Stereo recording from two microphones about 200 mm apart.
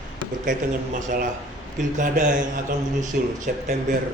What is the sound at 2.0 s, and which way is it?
A man's voice, 40° right (ahead or behind).